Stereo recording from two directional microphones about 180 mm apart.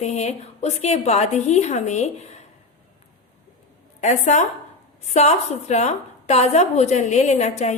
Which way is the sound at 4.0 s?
40° left (ahead or behind).